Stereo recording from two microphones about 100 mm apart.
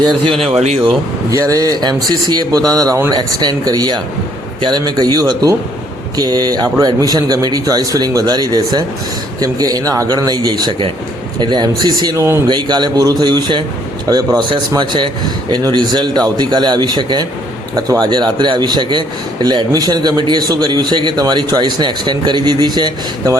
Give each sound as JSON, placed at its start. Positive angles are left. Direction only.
{"t": 0.4, "sound": "speech", "side_deg": -85}
{"t": 1.3, "sound": "a man's voice", "side_deg": -35}
{"t": 12.1, "sound": "speech", "side_deg": -25}
{"t": 12.5, "sound": "a man's voice", "side_deg": -50}
{"t": 14.8, "sound": "a man's voice", "side_deg": -50}